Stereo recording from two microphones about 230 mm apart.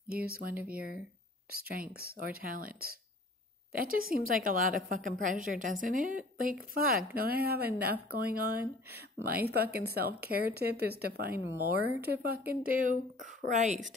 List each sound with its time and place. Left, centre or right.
0.1 s a woman's voice: right